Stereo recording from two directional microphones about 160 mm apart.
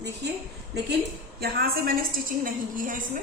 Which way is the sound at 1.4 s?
70° right (ahead or behind).